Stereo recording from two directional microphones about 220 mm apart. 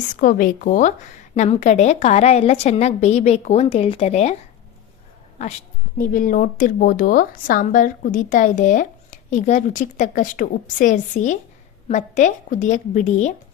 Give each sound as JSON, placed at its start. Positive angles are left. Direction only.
{"t": 0.2, "sound": "a woman's voice", "side_deg": 40}
{"t": 6.0, "sound": "a woman's voice", "side_deg": 40}